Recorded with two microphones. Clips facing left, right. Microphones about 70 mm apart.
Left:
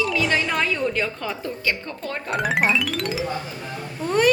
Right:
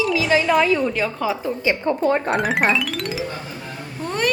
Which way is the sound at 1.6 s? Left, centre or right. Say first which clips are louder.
Right 10 dB; right.